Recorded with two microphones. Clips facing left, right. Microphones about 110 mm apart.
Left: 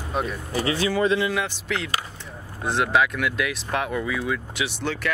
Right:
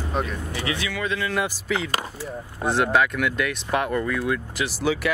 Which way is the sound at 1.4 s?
5° right (ahead or behind).